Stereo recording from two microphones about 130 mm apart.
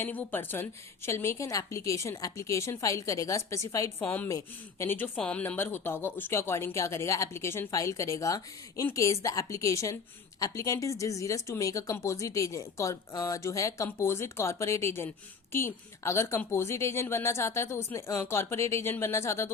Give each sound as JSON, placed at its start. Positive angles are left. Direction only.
{"t": 0.0, "sound": "speech", "side_deg": 15}
{"t": 4.0, "sound": "a woman's voice", "side_deg": 10}
{"t": 4.3, "sound": "speech", "side_deg": 20}